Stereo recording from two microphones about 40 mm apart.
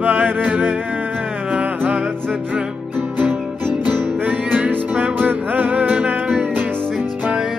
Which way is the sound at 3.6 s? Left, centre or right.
Right.